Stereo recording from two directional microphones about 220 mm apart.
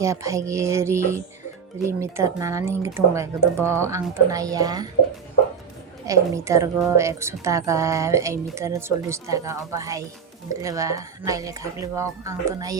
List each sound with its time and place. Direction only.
0.0 s speech: 15° right (ahead or behind)
6.1 s speech: 15° right (ahead or behind)